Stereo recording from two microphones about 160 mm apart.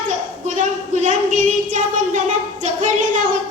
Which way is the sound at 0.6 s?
50° right (ahead or behind).